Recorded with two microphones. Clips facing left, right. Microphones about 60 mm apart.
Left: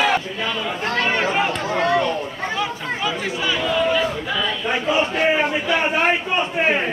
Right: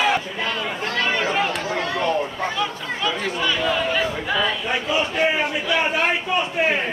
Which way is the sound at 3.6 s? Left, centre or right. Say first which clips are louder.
Left 5 dB; centre.